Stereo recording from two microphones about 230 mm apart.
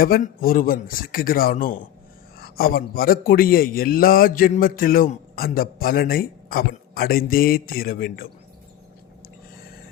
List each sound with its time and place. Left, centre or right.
0.0 s a man's voice: left